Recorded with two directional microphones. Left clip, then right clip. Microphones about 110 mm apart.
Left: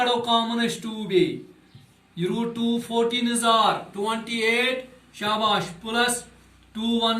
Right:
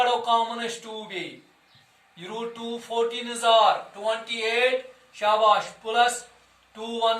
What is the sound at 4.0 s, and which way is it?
Speech, 15° right (ahead or behind).